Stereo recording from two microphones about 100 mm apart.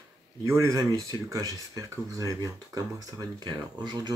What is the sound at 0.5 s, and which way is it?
Speech, 30° right (ahead or behind).